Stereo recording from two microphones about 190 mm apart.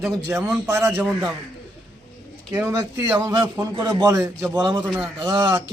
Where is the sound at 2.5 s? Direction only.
15° right (ahead or behind).